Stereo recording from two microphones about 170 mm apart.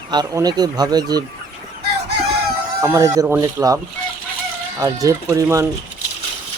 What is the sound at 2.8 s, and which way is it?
Speech, 20° right (ahead or behind).